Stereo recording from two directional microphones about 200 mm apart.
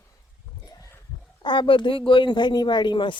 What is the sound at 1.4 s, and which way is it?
Speech, 25° left (ahead or behind).